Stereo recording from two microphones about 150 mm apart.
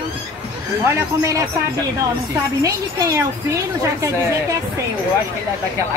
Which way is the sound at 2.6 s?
20° right (ahead or behind).